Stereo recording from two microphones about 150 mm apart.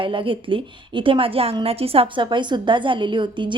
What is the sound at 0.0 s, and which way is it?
A woman's voice, 35° right (ahead or behind).